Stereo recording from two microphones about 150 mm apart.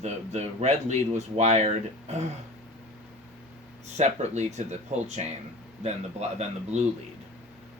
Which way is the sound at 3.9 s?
50° right (ahead or behind).